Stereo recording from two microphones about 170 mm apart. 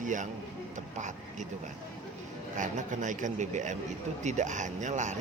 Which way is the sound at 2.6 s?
45° right (ahead or behind).